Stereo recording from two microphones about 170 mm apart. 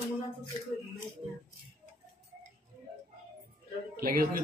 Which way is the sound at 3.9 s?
60° right (ahead or behind).